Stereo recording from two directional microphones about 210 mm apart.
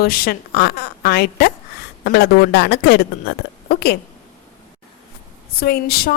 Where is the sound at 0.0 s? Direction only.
45° left (ahead or behind).